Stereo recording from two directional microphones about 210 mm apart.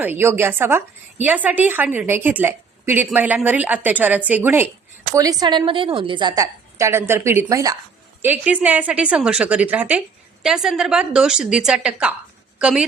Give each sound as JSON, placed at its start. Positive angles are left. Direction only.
{"t": 0.0, "sound": "a woman's voice", "side_deg": -10}